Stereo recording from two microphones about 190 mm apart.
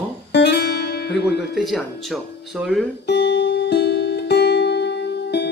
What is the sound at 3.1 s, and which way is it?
Music, 65° left (ahead or behind).